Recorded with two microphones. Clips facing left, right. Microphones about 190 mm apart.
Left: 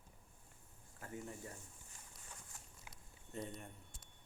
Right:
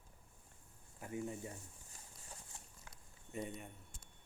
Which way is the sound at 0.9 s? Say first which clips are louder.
Right 5 dB; 15° right (ahead or behind).